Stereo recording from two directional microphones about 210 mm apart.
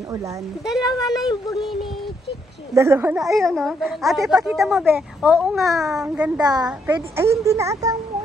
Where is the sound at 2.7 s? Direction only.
15° right (ahead or behind).